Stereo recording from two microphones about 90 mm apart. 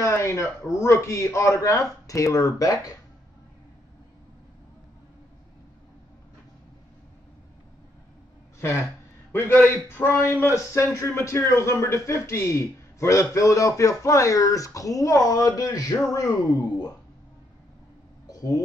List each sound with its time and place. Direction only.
0.0 s a man's voice: 30° left (ahead or behind)
9.3 s a man's voice: 25° left (ahead or behind)
18.3 s a sound: 40° left (ahead or behind)